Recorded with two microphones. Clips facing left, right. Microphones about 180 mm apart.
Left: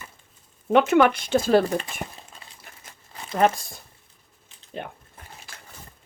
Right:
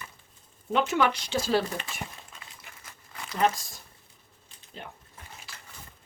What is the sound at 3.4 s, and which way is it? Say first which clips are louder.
Speech: left 5 dB; 55° left (ahead or behind).